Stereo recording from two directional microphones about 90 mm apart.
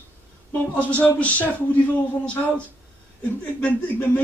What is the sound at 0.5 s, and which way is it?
A man's voice, 20° left (ahead or behind).